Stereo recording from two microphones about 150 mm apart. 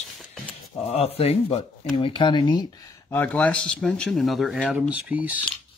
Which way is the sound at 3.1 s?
10° left (ahead or behind).